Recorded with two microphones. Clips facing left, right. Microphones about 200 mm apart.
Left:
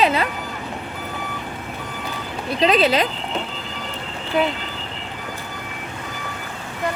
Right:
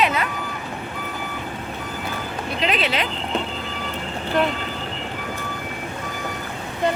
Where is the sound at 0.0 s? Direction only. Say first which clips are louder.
Left 3 dB; 30° left (ahead or behind).